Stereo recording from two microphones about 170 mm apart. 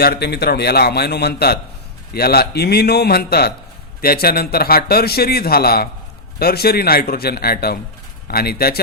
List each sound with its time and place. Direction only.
0.0 s a man's voice: 70° left (ahead or behind)